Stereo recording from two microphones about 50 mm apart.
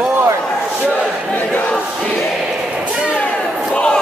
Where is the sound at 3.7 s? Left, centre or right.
Centre.